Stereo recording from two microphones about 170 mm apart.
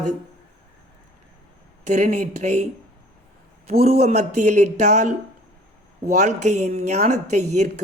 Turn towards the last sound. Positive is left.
turn(degrees=-40)  # may be behind; listen again after turning